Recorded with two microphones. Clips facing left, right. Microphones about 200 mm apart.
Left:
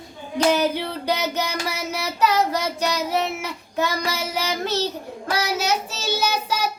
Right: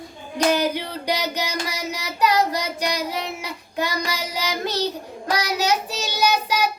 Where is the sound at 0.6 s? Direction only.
15° right (ahead or behind).